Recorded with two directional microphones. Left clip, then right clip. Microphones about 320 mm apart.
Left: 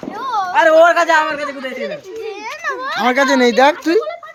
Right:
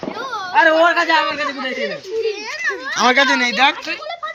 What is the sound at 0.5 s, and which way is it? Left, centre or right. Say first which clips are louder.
A man's voice: left 3 dB; centre.